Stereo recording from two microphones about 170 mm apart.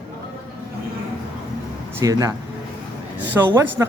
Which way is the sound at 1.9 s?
20° right (ahead or behind).